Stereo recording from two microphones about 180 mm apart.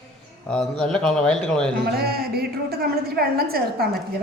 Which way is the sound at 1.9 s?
60° right (ahead or behind).